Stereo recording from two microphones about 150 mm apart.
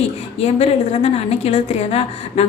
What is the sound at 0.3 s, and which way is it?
A woman's voice, 45° left (ahead or behind).